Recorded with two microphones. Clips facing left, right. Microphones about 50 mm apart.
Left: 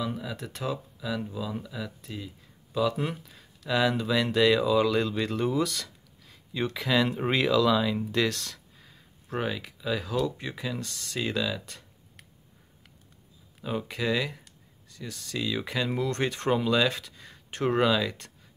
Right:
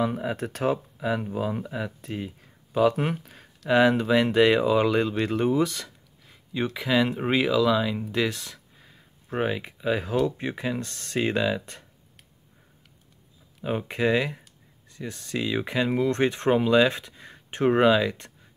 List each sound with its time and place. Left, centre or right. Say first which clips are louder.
0.0 s speech: right 7 dB; right; by 8.0 s centre
8.1 s a sound: right 1 dB; centre
9.4 s speech: right 5 dB; right
13.7 s speech: right 5 dB; right